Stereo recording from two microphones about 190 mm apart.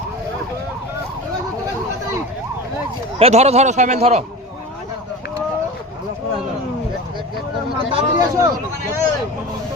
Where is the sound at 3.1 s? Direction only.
35° right (ahead or behind).